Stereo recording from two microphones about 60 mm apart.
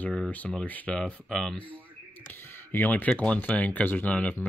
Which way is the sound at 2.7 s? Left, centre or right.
Left.